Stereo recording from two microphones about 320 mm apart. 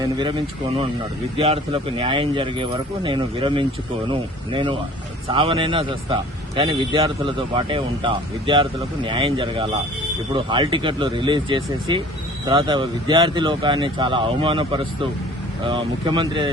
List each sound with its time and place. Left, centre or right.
0.0 s speech: centre